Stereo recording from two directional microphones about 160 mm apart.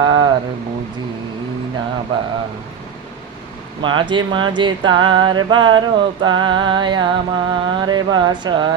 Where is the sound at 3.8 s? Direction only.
30° right (ahead or behind).